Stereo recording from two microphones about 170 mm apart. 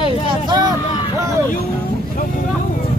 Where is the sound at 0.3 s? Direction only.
25° right (ahead or behind).